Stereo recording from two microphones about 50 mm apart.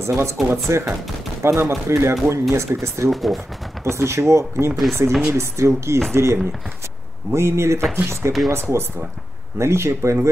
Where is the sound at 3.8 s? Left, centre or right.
Right.